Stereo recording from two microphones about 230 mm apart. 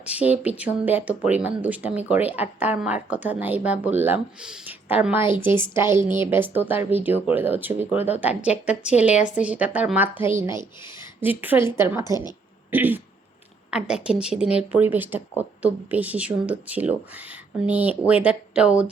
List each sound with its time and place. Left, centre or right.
0.0 s speech: centre
12.0 s a woman's voice: centre
12.7 s speech: centre